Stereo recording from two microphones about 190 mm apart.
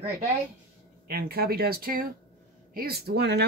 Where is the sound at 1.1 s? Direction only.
55° right (ahead or behind).